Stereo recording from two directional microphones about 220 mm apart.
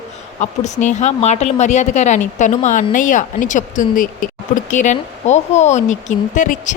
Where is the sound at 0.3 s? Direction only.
30° left (ahead or behind).